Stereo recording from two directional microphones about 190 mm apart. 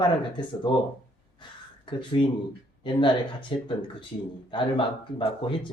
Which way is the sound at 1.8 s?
25° left (ahead or behind).